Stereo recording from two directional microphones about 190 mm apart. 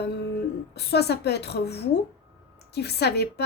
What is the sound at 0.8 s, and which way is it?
A woman's voice, 60° left (ahead or behind).